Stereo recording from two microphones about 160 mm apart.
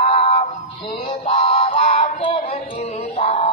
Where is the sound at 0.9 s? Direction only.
35° left (ahead or behind).